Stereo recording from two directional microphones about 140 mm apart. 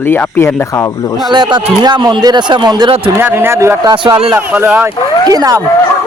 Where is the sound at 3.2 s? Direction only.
15° right (ahead or behind).